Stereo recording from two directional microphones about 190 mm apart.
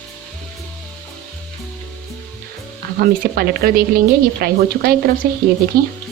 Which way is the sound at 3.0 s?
50° right (ahead or behind).